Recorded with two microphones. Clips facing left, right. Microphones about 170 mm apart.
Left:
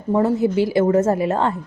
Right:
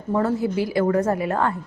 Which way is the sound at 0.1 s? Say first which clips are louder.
Left 4 dB; 20° left (ahead or behind).